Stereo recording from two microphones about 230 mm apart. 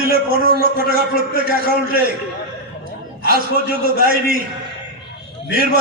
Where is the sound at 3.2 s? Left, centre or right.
Right.